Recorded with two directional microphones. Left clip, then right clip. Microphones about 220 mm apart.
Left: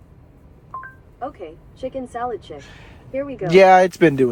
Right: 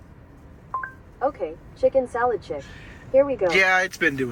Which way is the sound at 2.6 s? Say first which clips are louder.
Right 2 dB; 25° left (ahead or behind).